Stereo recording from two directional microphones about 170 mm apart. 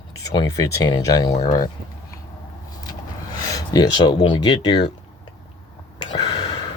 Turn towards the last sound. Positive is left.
turn(degrees=25)  # may be behind; listen again after turning